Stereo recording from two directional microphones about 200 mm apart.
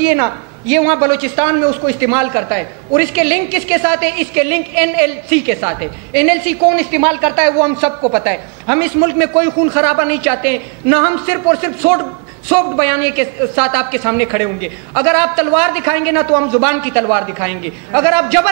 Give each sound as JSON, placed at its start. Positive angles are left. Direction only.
{"t": 0.1, "sound": "speech", "side_deg": -10}